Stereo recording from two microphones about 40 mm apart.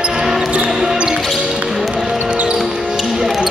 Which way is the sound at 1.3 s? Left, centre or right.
Centre.